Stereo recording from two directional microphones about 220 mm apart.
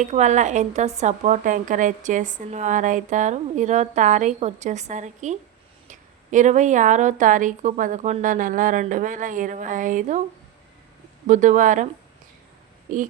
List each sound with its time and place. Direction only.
0.0 s speech: 30° right (ahead or behind)
11.3 s speech: 35° right (ahead or behind)
12.9 s speech: 35° right (ahead or behind)